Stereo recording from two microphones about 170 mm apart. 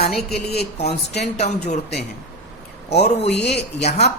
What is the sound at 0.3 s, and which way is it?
Speech, 70° left (ahead or behind).